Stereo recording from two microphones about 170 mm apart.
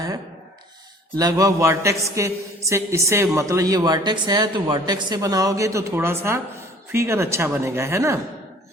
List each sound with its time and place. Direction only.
1.1 s a man's voice: 20° right (ahead or behind)